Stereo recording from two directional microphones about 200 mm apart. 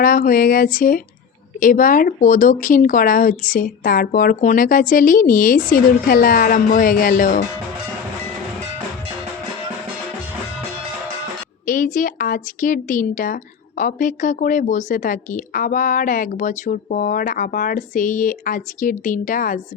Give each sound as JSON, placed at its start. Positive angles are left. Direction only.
{"t": 0.0, "sound": "speech", "side_deg": 45}
{"t": 11.6, "sound": "a woman's voice", "side_deg": 40}